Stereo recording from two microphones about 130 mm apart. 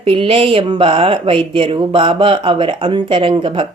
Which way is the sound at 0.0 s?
45° right (ahead or behind).